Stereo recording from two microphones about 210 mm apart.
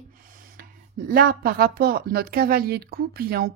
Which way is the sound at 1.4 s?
45° right (ahead or behind).